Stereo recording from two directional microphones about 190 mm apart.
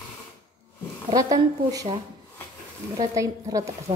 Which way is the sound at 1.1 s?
20° right (ahead or behind).